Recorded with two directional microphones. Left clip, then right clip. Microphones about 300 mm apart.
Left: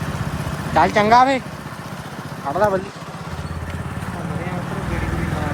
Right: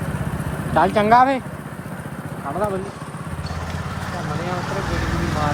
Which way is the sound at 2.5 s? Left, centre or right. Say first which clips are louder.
Left 5 dB; centre.